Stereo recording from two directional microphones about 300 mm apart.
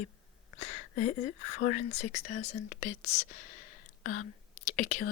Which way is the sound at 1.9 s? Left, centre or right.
Left.